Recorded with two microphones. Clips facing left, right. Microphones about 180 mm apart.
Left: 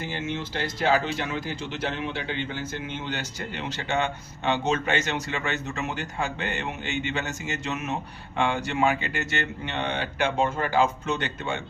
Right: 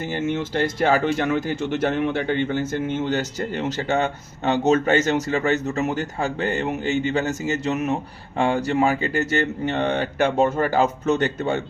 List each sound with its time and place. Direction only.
0.1 s speech: 50° right (ahead or behind)